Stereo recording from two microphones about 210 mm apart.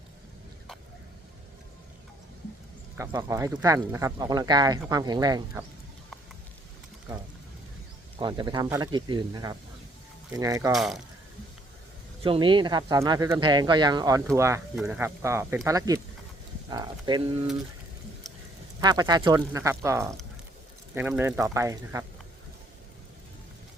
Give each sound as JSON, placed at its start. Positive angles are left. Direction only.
{"t": 3.0, "sound": "speech", "side_deg": -15}
{"t": 8.2, "sound": "speech", "side_deg": -20}
{"t": 10.7, "sound": "speech", "side_deg": 0}
{"t": 12.2, "sound": "speech", "side_deg": -25}
{"t": 16.6, "sound": "a sound", "side_deg": -20}
{"t": 18.3, "sound": "duck", "side_deg": 0}
{"t": 18.8, "sound": "speech", "side_deg": -20}